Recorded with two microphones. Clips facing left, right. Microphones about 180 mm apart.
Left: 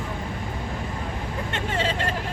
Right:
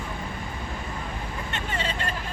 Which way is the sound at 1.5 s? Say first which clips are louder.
Left 5 dB; 90° left.